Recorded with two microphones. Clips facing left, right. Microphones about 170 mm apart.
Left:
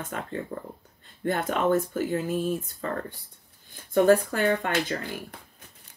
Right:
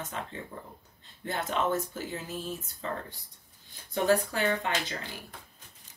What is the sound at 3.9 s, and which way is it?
Speech, 50° left (ahead or behind).